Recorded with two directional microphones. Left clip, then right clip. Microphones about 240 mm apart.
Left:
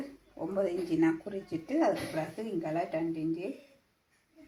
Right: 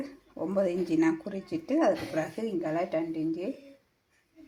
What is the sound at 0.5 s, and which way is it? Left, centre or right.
Speech, right.